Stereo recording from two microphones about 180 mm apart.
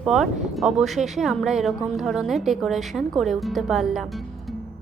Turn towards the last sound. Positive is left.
turn(degrees=0)  # may be behind; listen again after turning